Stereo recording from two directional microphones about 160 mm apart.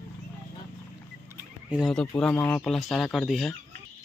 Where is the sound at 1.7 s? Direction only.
Centre (ahead or behind).